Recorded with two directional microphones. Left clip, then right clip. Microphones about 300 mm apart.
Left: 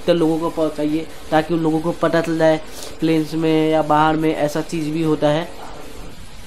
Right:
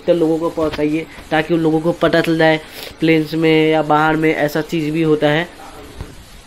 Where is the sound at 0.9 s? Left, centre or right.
Centre.